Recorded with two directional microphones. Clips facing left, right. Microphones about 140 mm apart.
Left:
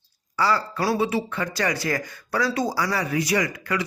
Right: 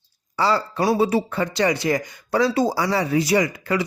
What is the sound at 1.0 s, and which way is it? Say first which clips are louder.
Speech: right 4 dB; 35° right (ahead or behind).